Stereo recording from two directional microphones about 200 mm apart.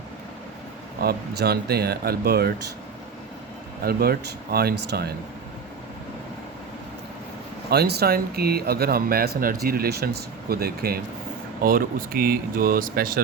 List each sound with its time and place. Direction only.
1.0 s a man's voice: 55° right (ahead or behind)
3.8 s a man's voice: 50° right (ahead or behind)
7.7 s a man's voice: 55° right (ahead or behind)